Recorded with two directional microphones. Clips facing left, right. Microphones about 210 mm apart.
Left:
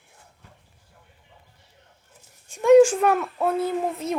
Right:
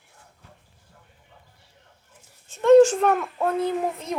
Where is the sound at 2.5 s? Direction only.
10° left (ahead or behind).